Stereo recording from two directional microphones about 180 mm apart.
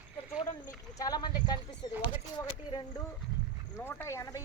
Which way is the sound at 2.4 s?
25° left (ahead or behind).